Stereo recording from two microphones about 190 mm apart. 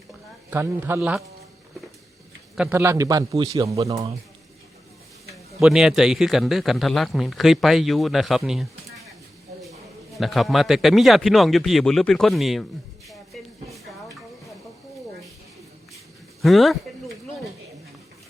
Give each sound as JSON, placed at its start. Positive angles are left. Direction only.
{"t": 0.5, "sound": "a man's voice", "side_deg": -10}
{"t": 2.6, "sound": "a man's voice", "side_deg": -10}
{"t": 5.5, "sound": "a man's voice", "side_deg": 0}
{"t": 10.2, "sound": "a man's voice", "side_deg": 0}
{"t": 13.1, "sound": "a sound", "side_deg": 0}
{"t": 16.4, "sound": "a sound", "side_deg": 0}